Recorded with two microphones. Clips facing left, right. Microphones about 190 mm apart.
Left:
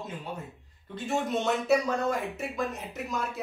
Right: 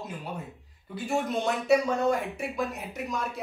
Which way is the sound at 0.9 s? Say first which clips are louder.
Right 1 dB; centre (ahead or behind).